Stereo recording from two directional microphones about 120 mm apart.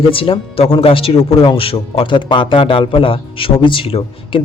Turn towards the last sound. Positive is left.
turn(degrees=50)  # may be behind; listen again after turning